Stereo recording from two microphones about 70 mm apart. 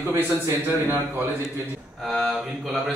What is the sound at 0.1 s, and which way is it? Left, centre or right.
Speech, right.